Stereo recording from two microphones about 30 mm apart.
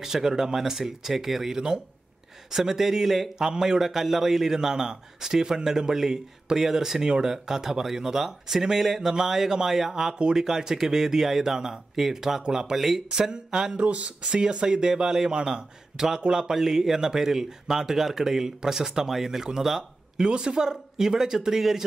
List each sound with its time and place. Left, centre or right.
0.0 s a man's voice: centre
3.8 s a man's voice: centre
12.4 s speech: right
12.7 s a man's voice: centre
13.1 s speech: right
13.7 s speech: right
14.4 s a man's voice: right; by 20.2 s centre
20.2 s speech: right; by 21.8 s centre